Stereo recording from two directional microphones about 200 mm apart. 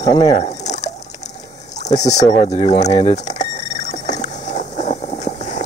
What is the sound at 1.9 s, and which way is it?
Speech, 35° left (ahead or behind).